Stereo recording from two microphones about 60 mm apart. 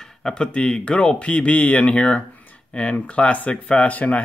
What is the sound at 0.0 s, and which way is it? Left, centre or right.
Speech, centre.